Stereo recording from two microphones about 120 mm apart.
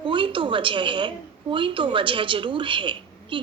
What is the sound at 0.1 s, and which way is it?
A woman's voice, 45° right (ahead or behind).